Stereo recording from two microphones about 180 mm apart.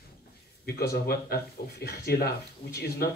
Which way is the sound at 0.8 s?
60° left (ahead or behind).